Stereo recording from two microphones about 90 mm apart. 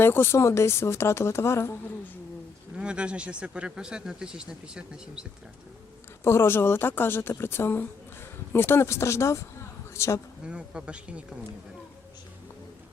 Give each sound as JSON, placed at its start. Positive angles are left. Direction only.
{"t": 0.0, "sound": "speech", "side_deg": 25}
{"t": 2.7, "sound": "speech", "side_deg": -10}
{"t": 6.2, "sound": "speech", "side_deg": 30}
{"t": 10.4, "sound": "speech", "side_deg": -10}